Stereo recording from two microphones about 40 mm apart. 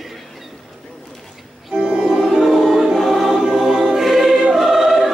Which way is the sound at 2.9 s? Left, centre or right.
Centre.